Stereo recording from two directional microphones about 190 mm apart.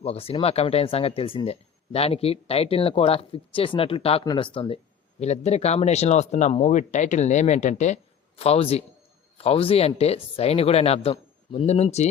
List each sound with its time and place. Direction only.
0.0 s speech: 30° left (ahead or behind)